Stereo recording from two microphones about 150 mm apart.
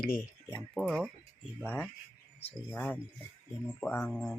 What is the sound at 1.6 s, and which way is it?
Speech, 10° left (ahead or behind).